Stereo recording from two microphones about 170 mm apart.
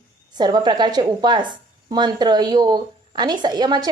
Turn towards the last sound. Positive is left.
turn(degrees=-25)  # may be behind; listen again after turning